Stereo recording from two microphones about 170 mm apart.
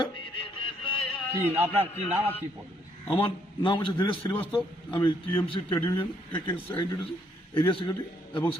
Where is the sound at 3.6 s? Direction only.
30° left (ahead or behind).